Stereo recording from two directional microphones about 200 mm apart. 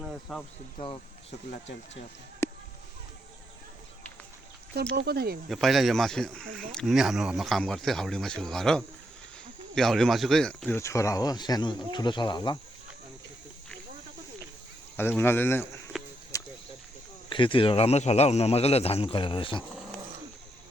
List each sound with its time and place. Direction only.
0.0 s speech: centre (ahead or behind)
2.4 s a sound: 15° left (ahead or behind)
4.9 s speech: 55° right (ahead or behind)
5.5 s speech: centre (ahead or behind); by 12.5 s 20° left (ahead or behind)
14.9 s speech: 10° left (ahead or behind)
16.3 s cricket: 15° left (ahead or behind)
17.2 s a man's voice: 25° left (ahead or behind)